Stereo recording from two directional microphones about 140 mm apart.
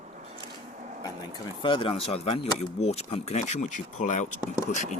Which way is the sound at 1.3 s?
35° left (ahead or behind).